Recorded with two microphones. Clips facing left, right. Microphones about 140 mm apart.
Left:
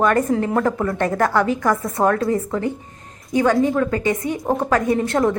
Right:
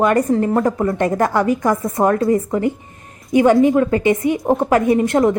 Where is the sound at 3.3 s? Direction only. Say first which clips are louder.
Right 5 dB; 15° right (ahead or behind).